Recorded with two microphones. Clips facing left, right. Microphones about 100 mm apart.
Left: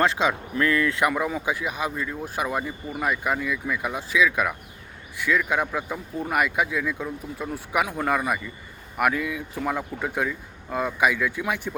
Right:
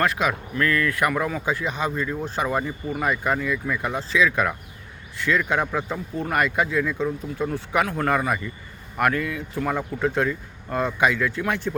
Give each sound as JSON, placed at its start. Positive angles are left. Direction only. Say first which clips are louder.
{"t": 0.0, "sound": "speech", "louder": "left 1 dB", "side_deg": 25}